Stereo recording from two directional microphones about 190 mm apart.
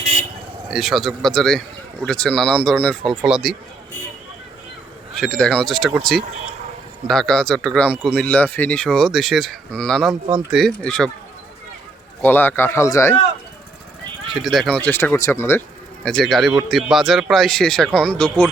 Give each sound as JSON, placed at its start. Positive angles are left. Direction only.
{"t": 0.0, "sound": "a sound", "side_deg": -35}
{"t": 0.7, "sound": "speech", "side_deg": 0}
{"t": 5.1, "sound": "speech", "side_deg": 5}
{"t": 12.2, "sound": "speech", "side_deg": 10}
{"t": 14.4, "sound": "speech", "side_deg": 0}
{"t": 16.0, "sound": "speech", "side_deg": 0}